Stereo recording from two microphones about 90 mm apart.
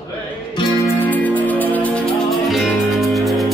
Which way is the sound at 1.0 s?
20° left (ahead or behind).